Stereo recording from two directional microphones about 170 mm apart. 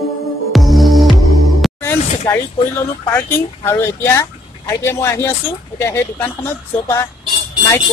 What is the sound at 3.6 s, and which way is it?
Speech, 15° left (ahead or behind).